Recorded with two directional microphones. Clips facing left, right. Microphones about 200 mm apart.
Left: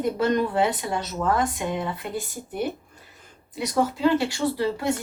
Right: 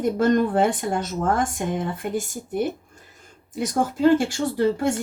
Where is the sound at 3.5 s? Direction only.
50° right (ahead or behind).